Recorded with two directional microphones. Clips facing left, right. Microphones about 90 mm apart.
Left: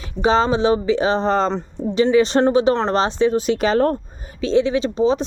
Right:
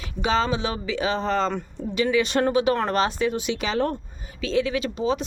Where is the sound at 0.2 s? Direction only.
35° left (ahead or behind).